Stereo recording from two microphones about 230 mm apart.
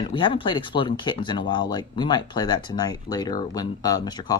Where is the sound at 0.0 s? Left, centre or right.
Left.